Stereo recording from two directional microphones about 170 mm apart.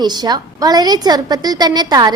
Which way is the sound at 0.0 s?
25° right (ahead or behind).